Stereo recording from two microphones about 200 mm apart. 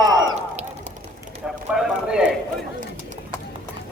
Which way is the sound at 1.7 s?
5° right (ahead or behind).